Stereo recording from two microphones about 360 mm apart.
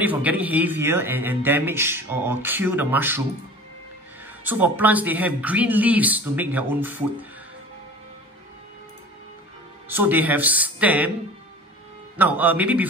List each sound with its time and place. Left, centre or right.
0.0 s speech: centre
4.5 s speech: centre
9.8 s speech: centre
12.2 s speech: centre